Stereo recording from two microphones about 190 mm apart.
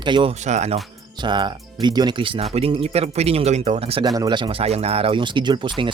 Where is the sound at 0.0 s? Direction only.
25° right (ahead or behind).